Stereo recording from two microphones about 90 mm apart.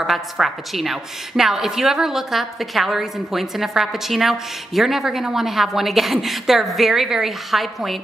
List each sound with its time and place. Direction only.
0.0 s a woman's voice: centre (ahead or behind)